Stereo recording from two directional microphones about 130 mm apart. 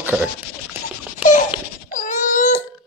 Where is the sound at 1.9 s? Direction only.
75° left (ahead or behind).